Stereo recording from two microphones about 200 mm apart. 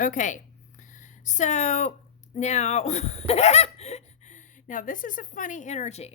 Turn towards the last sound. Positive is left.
turn(degrees=35)  # may be behind; listen again after turning